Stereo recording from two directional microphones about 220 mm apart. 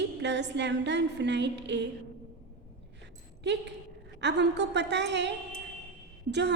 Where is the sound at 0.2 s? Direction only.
50° right (ahead or behind).